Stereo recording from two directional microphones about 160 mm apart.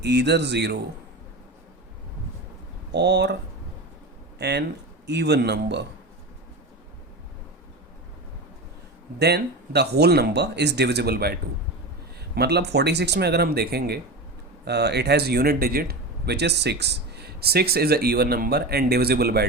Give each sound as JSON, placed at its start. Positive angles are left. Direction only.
{"t": 0.0, "sound": "speech", "side_deg": -90}
{"t": 2.9, "sound": "speech", "side_deg": -90}
{"t": 4.4, "sound": "speech", "side_deg": -90}
{"t": 9.1, "sound": "speech", "side_deg": -90}
{"t": 12.3, "sound": "speech", "side_deg": -90}